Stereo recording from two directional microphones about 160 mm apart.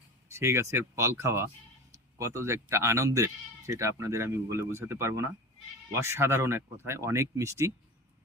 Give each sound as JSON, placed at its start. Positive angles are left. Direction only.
{"t": 0.3, "sound": "speech", "side_deg": -15}